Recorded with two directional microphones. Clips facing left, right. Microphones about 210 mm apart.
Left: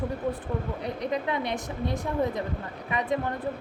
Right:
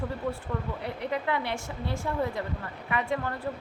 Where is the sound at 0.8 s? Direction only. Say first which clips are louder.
Left 2 dB; 15° left (ahead or behind).